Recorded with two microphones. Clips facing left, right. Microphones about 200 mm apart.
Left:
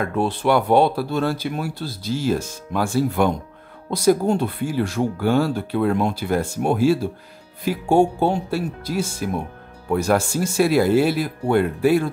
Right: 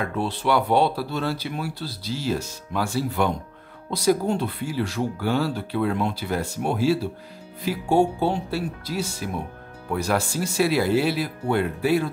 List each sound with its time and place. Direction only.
0.0 s speech: 50° left (ahead or behind)